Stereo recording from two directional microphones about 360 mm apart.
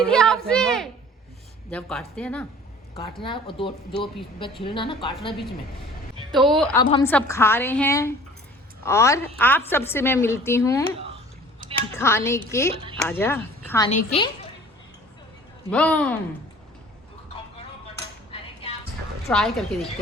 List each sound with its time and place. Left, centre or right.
0.0 s a sound: centre
1.7 s a woman's voice: centre
6.3 s a woman's voice: centre
11.9 s a woman's voice: centre
12.7 s speech: centre
13.0 s a woman's voice: centre
15.7 s speech: centre
18.3 s cutlery: centre
19.3 s speech: centre